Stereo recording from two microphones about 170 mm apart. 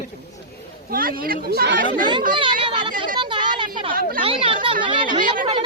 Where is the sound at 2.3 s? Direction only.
30° right (ahead or behind).